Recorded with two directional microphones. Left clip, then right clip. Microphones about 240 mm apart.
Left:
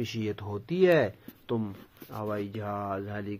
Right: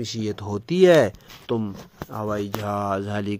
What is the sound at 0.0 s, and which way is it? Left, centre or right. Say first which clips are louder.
Speech: right 5 dB; right.